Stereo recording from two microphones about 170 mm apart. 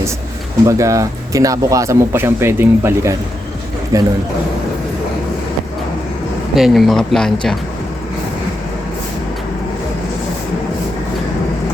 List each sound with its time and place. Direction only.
0.6 s a man's voice: 20° right (ahead or behind)
6.6 s speech: centre (ahead or behind)